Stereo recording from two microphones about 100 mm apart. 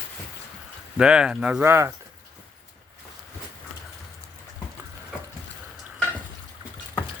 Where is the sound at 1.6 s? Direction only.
25° right (ahead or behind).